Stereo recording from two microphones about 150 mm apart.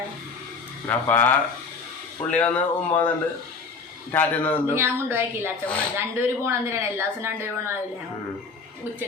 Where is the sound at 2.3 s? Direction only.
10° left (ahead or behind).